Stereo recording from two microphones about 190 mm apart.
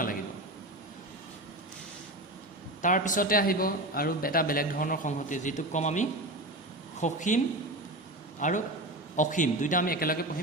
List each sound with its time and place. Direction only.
2.8 s a man's voice: 45° left (ahead or behind)